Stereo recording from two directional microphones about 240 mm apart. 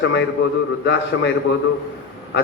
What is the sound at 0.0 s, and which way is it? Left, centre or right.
A man's voice, left.